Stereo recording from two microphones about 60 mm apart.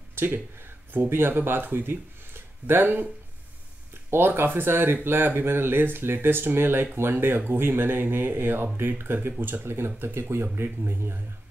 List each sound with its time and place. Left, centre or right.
0.1 s speech: right
4.1 s speech: right